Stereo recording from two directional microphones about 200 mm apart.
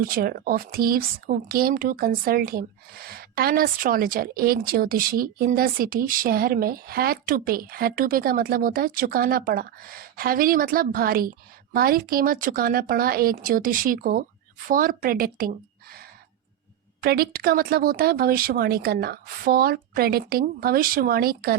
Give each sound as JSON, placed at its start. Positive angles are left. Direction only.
{"t": 0.0, "sound": "speech", "side_deg": -45}